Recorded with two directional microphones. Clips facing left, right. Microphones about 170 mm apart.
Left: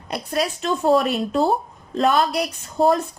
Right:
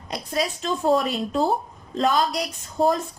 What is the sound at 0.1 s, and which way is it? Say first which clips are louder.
A woman's voice: left 3 dB; 65° left (ahead or behind).